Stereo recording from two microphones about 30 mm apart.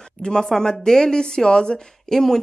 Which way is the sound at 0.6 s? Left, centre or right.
Centre.